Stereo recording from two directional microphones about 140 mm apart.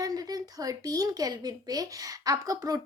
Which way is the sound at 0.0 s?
25° right (ahead or behind).